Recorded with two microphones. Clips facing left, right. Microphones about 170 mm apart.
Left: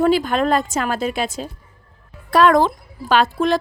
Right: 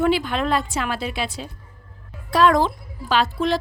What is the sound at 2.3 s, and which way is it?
A woman's voice, 55° left (ahead or behind).